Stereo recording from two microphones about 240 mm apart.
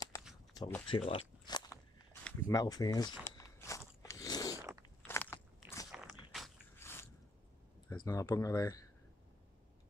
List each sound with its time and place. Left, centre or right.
0.6 s speech: centre
0.8 s walk: left
4.0 s biting: centre
5.9 s biting: centre
6.8 s squish: centre
8.0 s speech: centre